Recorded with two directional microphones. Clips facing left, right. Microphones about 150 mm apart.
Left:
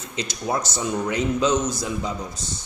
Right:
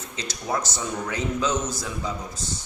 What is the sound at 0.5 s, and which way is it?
A man's voice, 20° left (ahead or behind).